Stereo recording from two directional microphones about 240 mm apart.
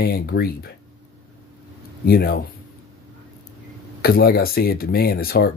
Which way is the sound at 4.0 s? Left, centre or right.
Left.